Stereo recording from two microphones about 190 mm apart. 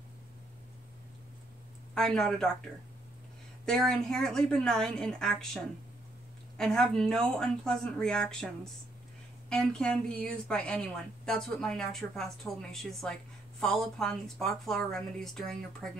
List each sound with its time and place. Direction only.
2.0 s a woman's voice: centre (ahead or behind)
3.6 s a woman's voice: 5° left (ahead or behind)
6.6 s a woman's voice: 5° left (ahead or behind)
9.5 s a woman's voice: 5° left (ahead or behind)